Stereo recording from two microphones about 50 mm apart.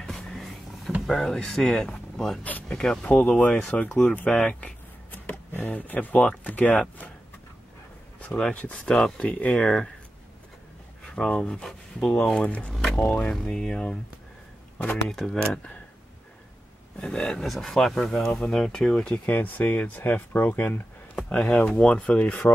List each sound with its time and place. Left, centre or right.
0.0 s vehicle: centre
1.0 s speech: centre
3.1 s speech: left
4.5 s speech: centre
5.1 s speech: left
8.2 s speech: left
9.2 s speech: left
11.1 s speech: centre
12.7 s speech: centre
15.0 s speech: centre
17.0 s speech: centre
17.4 s speech: centre; by 20.8 s left
21.5 s speech: left